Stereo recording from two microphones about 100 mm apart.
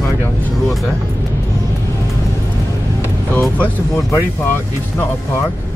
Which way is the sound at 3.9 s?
25° left (ahead or behind).